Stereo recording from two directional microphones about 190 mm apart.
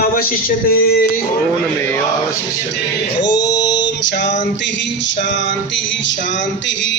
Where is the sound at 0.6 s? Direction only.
50° left (ahead or behind).